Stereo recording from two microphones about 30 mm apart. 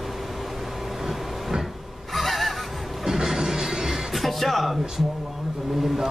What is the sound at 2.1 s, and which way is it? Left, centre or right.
Neigh, centre.